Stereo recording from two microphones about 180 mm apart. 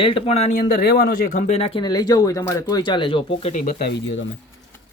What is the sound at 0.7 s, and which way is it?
Speech, 60° left (ahead or behind).